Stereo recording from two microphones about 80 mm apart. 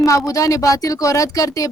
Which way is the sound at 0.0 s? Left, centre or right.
Left.